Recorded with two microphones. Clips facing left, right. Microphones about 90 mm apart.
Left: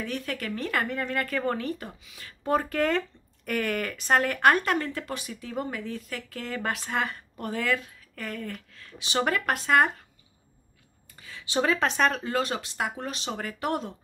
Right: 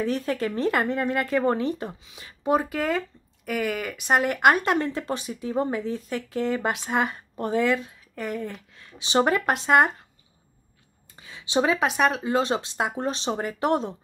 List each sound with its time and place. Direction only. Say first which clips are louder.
0.0 s speech: right 7 dB; 30° right (ahead or behind)
11.1 s speech: right 4 dB; 20° right (ahead or behind)